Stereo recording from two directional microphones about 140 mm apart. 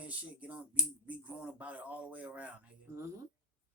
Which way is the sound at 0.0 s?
10° right (ahead or behind).